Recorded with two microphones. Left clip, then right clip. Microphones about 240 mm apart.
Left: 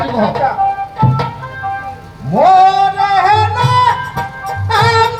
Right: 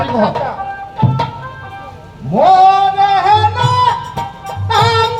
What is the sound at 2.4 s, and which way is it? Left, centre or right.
Music, left.